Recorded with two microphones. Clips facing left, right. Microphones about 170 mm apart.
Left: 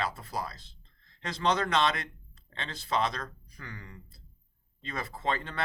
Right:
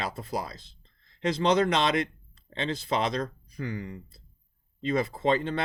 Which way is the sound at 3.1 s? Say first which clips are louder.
Right 10 dB; 20° right (ahead or behind).